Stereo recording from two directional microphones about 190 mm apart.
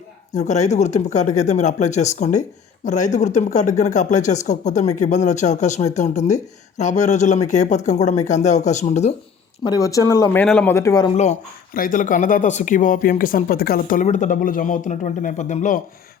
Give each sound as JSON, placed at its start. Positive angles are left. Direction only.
{"t": 0.3, "sound": "speech", "side_deg": 40}
{"t": 9.6, "sound": "speech", "side_deg": 20}
{"t": 10.4, "sound": "speech", "side_deg": 5}
{"t": 11.2, "sound": "speech", "side_deg": 40}